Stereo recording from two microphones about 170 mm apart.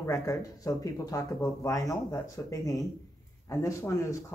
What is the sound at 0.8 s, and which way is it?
Speech, 20° left (ahead or behind).